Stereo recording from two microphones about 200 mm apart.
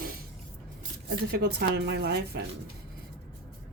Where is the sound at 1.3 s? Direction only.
50° right (ahead or behind).